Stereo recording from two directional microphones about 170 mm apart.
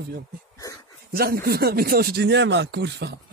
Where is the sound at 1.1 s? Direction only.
65° right (ahead or behind); by 3.2 s 80° right.